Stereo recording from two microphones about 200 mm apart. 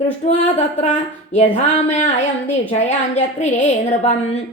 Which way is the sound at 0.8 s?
40° left (ahead or behind).